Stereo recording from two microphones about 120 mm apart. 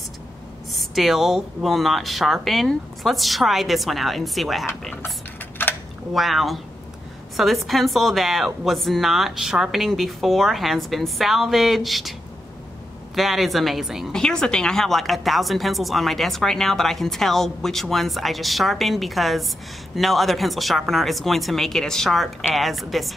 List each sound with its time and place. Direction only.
0.7 s a woman's voice: centre (ahead or behind)
5.6 s a sound: 15° left (ahead or behind)
6.1 s a woman's voice: centre (ahead or behind)